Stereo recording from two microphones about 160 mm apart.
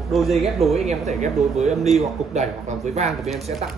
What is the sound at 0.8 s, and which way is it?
Speech, 45° right (ahead or behind).